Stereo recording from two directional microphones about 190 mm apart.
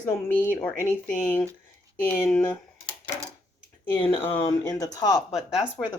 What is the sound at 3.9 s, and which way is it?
Speech, 10° left (ahead or behind).